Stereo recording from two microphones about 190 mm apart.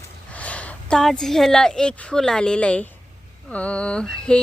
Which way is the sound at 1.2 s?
Centre (ahead or behind).